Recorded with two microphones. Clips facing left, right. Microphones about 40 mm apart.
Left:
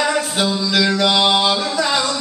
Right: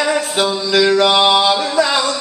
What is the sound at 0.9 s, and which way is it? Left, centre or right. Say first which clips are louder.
Mantra: right 4 dB; right.